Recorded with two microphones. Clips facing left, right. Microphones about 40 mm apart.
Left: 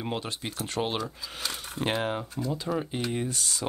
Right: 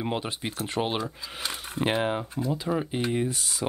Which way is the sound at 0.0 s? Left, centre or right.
Centre.